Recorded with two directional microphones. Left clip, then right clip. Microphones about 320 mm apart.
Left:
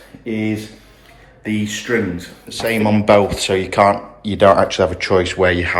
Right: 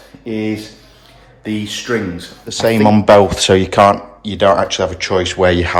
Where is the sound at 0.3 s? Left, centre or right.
Centre.